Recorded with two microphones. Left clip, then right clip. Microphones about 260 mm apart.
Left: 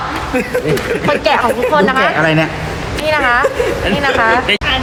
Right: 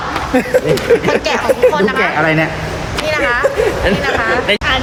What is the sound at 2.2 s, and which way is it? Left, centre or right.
Speech, left.